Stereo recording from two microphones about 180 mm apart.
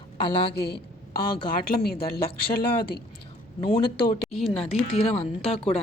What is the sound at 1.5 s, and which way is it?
Speech, 55° left (ahead or behind).